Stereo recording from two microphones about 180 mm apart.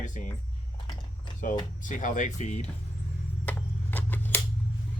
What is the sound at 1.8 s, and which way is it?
Speech, 45° left (ahead or behind).